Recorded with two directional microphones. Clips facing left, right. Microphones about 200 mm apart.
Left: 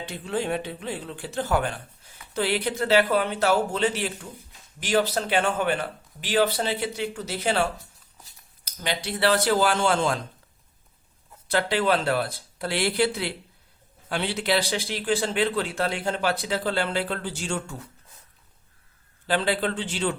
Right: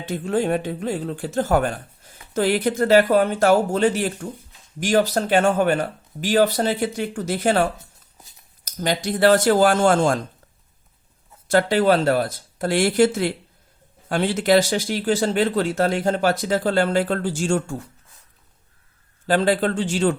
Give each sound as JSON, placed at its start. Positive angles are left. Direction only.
{"t": 0.1, "sound": "speech", "side_deg": -45}
{"t": 11.4, "sound": "speech", "side_deg": -45}
{"t": 19.3, "sound": "speech", "side_deg": -45}